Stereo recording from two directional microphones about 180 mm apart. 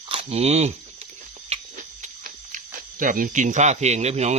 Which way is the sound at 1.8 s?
45° right (ahead or behind).